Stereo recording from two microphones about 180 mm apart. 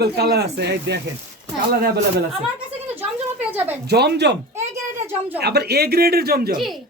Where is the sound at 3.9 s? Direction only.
65° right (ahead or behind).